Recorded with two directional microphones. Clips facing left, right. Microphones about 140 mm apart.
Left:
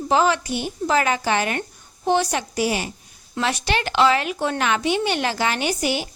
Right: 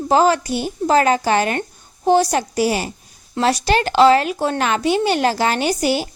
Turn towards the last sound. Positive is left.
turn(degrees=-40)  # may be behind; listen again after turning